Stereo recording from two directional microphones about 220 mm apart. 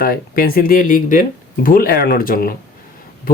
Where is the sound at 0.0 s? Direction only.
40° left (ahead or behind).